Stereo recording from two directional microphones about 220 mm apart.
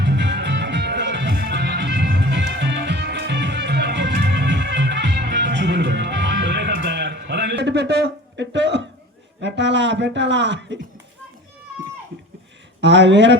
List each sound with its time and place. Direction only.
0.0 s music: 50° right (ahead or behind)
9.4 s speech: 55° right (ahead or behind)
12.8 s speech: 55° right (ahead or behind)